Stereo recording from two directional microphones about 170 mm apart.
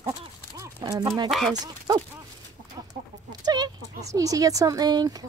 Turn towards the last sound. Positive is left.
turn(degrees=-25)  # may be behind; listen again after turning